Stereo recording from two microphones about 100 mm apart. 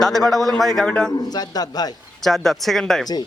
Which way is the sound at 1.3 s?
40° left (ahead or behind).